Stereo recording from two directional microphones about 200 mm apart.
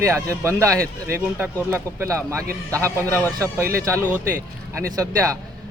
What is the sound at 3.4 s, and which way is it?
Speech, 15° right (ahead or behind).